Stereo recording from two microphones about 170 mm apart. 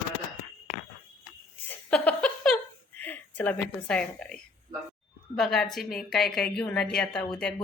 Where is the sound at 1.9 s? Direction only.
5° left (ahead or behind).